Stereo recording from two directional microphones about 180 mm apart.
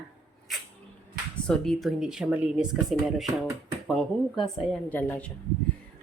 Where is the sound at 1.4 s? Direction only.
5° left (ahead or behind).